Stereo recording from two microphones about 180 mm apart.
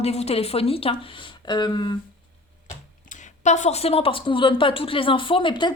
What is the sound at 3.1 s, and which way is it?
A woman's voice, 40° left (ahead or behind).